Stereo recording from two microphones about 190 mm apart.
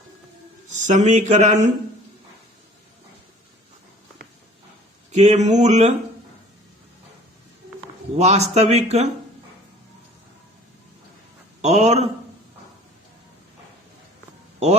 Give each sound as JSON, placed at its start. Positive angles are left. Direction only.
{"t": 0.7, "sound": "speech", "side_deg": -40}
{"t": 5.1, "sound": "speech", "side_deg": -35}
{"t": 8.2, "sound": "speech", "side_deg": -35}
{"t": 11.6, "sound": "speech", "side_deg": -35}